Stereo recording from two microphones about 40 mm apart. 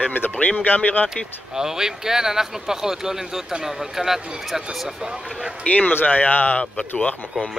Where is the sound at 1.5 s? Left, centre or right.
Centre.